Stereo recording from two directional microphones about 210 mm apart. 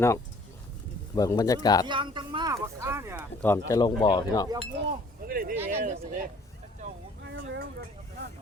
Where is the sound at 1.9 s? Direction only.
25° right (ahead or behind).